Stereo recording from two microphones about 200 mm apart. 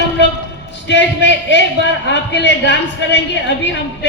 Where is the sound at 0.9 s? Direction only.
60° left (ahead or behind).